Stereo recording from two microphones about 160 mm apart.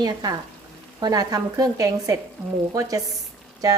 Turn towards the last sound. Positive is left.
turn(degrees=-20)  # may be behind; listen again after turning